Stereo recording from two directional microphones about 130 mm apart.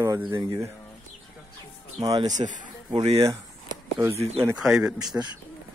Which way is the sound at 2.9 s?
45° right (ahead or behind).